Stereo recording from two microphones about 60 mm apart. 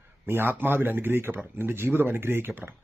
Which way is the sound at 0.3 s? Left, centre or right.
Right.